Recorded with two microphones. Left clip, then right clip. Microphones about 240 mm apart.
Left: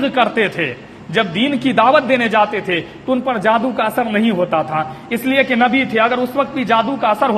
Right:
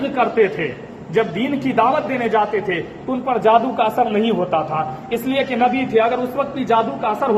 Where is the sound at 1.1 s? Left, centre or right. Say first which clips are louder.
Left 2 dB; left.